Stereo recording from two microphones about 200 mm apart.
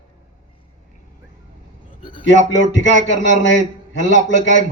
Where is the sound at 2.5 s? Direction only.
65° left (ahead or behind).